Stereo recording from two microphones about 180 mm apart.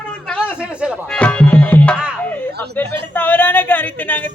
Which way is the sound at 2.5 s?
65° right (ahead or behind).